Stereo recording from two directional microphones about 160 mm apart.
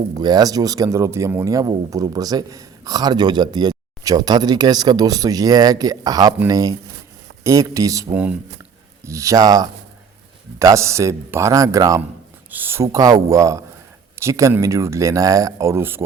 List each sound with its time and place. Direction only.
0.2 s speech: 25° right (ahead or behind)
8.1 s speech: 10° right (ahead or behind)
9.0 s speech: 20° right (ahead or behind)